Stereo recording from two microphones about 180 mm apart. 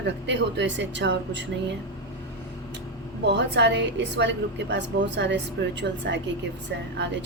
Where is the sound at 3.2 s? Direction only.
70° right (ahead or behind).